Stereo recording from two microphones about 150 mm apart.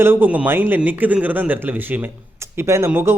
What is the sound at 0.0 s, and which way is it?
A man's voice, 15° right (ahead or behind).